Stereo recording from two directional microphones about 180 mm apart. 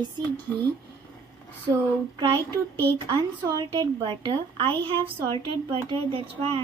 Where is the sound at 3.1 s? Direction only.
20° right (ahead or behind).